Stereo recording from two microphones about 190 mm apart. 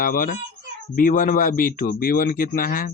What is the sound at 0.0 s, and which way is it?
Speech, 50° left (ahead or behind).